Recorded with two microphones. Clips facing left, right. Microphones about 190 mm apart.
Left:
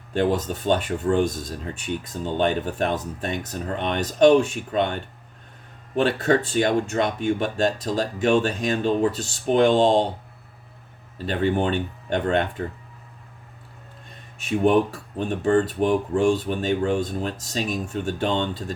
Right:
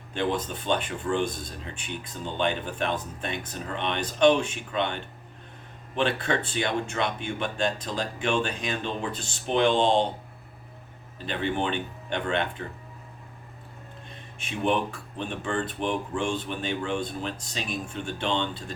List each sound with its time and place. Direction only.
0.1 s speech: 40° left (ahead or behind)
11.3 s speech: 40° left (ahead or behind)
14.4 s speech: 40° left (ahead or behind)